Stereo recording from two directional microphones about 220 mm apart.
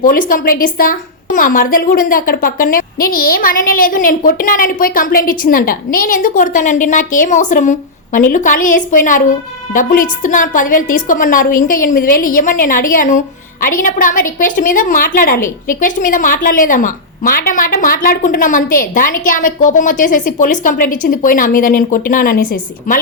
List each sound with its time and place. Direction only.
0.0 s a woman's voice: 40° left (ahead or behind)